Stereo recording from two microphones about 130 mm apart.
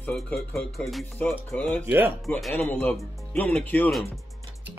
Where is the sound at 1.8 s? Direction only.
15° right (ahead or behind).